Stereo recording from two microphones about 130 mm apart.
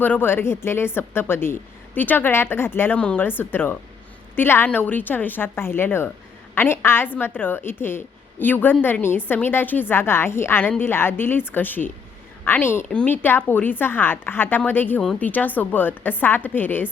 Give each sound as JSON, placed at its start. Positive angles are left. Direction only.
{"t": 0.0, "sound": "a woman's voice", "side_deg": 15}